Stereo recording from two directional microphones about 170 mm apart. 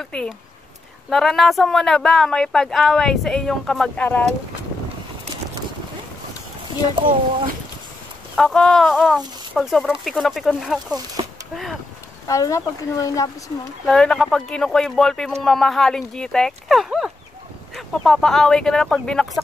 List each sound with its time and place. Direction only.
0.0 s speech: 5° left (ahead or behind)
8.4 s speech: 5° left (ahead or behind)
12.3 s speech: 20° left (ahead or behind)
13.8 s speech: 5° left (ahead or behind)